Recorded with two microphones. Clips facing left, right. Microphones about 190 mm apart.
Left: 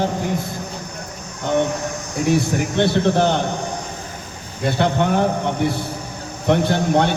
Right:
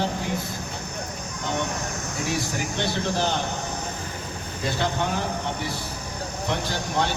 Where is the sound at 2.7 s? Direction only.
60° left (ahead or behind).